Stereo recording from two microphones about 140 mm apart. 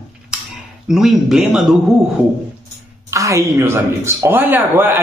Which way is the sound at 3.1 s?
20° right (ahead or behind).